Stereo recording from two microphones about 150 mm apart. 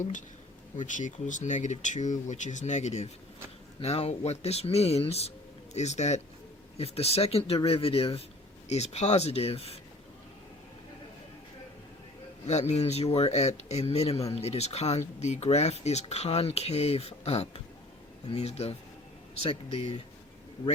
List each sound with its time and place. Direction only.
0.0 s a man's voice: 60° left (ahead or behind); by 9.7 s 40° left (ahead or behind)
12.5 s speech: 50° left (ahead or behind)